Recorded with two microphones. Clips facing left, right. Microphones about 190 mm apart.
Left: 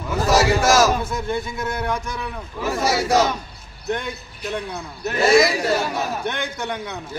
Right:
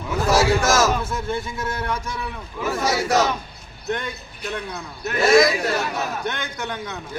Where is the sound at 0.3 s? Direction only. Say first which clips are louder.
Left 2 dB; 10° left (ahead or behind).